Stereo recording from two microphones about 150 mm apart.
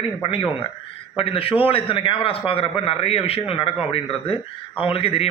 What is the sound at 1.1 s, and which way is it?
A man's voice, 40° left (ahead or behind).